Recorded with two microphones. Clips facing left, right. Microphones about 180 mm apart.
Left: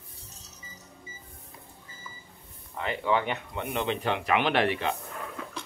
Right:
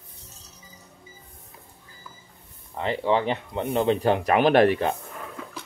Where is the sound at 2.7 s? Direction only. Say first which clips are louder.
Right 4 dB; 30° right (ahead or behind).